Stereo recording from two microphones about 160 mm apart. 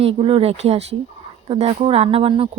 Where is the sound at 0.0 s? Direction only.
35° right (ahead or behind).